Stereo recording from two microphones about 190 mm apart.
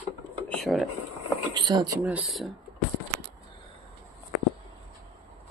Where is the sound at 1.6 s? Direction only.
20° right (ahead or behind).